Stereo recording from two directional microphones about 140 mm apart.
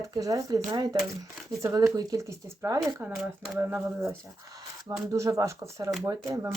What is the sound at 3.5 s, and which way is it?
Speech, 15° right (ahead or behind).